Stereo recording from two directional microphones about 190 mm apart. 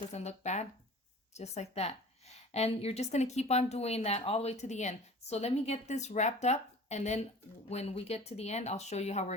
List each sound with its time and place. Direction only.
0.1 s a woman's voice: 35° left (ahead or behind)